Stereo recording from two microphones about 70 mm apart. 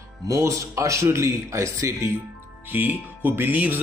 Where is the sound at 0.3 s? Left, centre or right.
Right.